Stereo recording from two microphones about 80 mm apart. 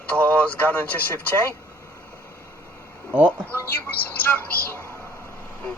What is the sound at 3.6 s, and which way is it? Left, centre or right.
Speech, left.